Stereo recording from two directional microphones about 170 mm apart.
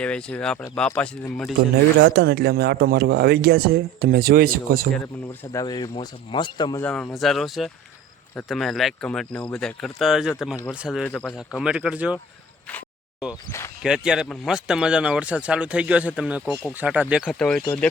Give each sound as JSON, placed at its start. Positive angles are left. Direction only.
{"t": 0.0, "sound": "speech", "side_deg": 5}
{"t": 2.0, "sound": "speech", "side_deg": -75}
{"t": 5.5, "sound": "speech", "side_deg": 20}
{"t": 6.8, "sound": "speech", "side_deg": 5}
{"t": 11.0, "sound": "speech", "side_deg": 5}
{"t": 11.3, "sound": "speech", "side_deg": -5}
{"t": 13.8, "sound": "speech", "side_deg": -5}
{"t": 17.2, "sound": "speech", "side_deg": 5}